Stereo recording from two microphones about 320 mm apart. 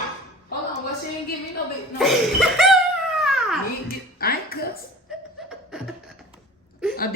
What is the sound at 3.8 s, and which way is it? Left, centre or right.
Speech, left.